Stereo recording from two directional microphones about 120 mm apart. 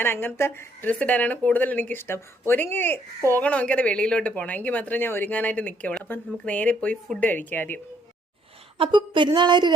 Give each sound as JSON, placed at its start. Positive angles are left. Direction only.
{"t": 0.0, "sound": "speech", "side_deg": 20}
{"t": 8.8, "sound": "a woman's voice", "side_deg": -40}